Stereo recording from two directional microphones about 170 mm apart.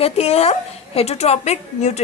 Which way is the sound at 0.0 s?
35° left (ahead or behind).